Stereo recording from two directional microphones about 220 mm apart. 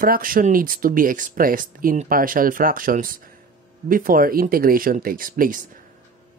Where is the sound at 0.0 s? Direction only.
40° right (ahead or behind).